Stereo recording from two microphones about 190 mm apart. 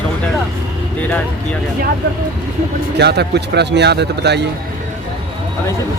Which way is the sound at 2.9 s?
60° right (ahead or behind).